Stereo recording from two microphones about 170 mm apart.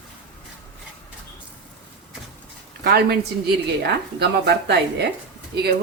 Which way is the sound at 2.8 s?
70° right (ahead or behind).